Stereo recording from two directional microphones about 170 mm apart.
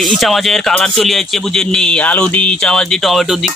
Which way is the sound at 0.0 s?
Centre (ahead or behind).